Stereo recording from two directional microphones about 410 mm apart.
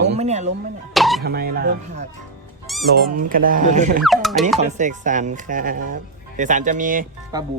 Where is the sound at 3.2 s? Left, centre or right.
Centre.